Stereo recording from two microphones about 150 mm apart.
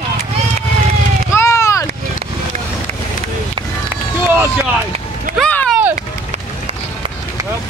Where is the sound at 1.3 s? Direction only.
20° left (ahead or behind).